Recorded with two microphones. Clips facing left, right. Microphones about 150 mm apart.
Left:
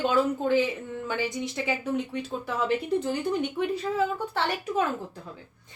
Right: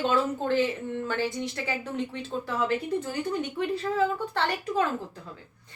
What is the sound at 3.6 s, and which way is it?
Speech, 20° left (ahead or behind).